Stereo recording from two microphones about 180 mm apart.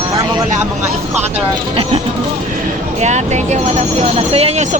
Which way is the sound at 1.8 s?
30° right (ahead or behind).